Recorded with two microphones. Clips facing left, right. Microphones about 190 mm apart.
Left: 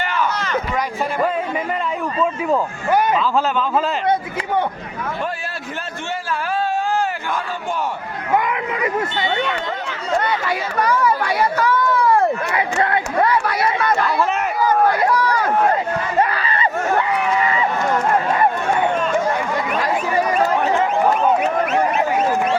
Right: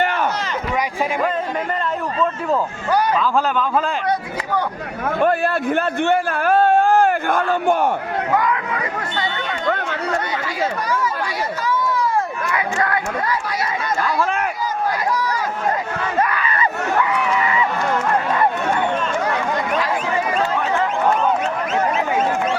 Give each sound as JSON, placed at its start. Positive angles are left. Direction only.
{"t": 0.0, "sound": "a sound", "side_deg": -55}
{"t": 6.1, "sound": "a man's voice", "side_deg": -55}
{"t": 8.4, "sound": "speech", "side_deg": 20}
{"t": 10.8, "sound": "chatter", "side_deg": 60}
{"t": 12.5, "sound": "speech", "side_deg": 25}
{"t": 13.4, "sound": "speech", "side_deg": 60}
{"t": 14.6, "sound": "run", "side_deg": 60}
{"t": 16.3, "sound": "a sound", "side_deg": 30}